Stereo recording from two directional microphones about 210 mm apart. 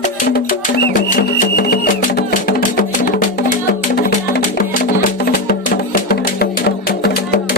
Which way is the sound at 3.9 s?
45° left (ahead or behind).